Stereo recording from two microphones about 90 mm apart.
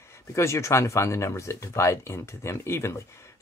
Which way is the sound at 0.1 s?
30° left (ahead or behind).